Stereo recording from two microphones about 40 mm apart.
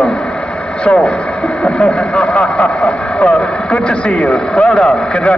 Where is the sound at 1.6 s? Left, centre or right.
Left.